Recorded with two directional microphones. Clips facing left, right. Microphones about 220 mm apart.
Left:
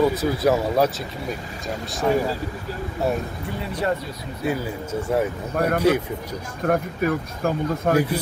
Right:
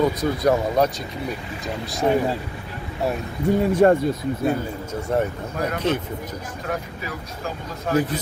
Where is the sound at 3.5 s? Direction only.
45° right (ahead or behind).